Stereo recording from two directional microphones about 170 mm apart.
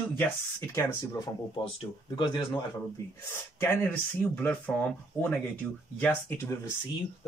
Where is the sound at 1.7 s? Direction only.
30° left (ahead or behind).